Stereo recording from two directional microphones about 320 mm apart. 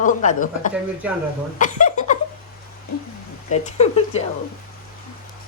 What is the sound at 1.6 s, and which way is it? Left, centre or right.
Speech, left.